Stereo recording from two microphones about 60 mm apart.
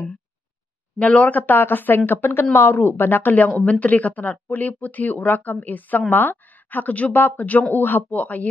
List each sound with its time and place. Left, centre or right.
0.9 s speech: centre